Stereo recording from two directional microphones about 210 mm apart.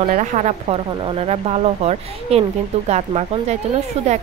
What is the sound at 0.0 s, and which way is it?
Speech, 40° right (ahead or behind).